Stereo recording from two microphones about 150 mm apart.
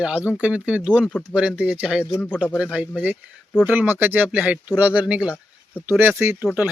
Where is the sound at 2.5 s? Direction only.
5° right (ahead or behind).